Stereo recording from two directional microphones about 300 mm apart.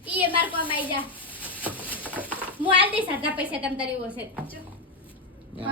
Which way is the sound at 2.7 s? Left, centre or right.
Centre.